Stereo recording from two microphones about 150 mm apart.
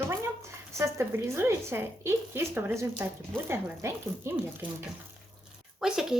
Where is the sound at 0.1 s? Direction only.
20° right (ahead or behind).